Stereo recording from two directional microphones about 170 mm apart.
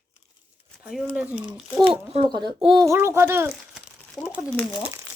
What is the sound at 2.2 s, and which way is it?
Speech, 25° right (ahead or behind).